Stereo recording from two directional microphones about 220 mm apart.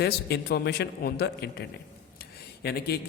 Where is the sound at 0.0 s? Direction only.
45° left (ahead or behind).